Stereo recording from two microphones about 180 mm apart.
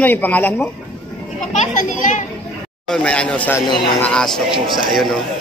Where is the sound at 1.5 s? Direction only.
45° left (ahead or behind).